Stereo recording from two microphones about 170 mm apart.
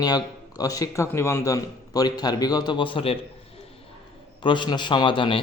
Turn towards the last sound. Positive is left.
turn(degrees=30)  # may be behind; listen again after turning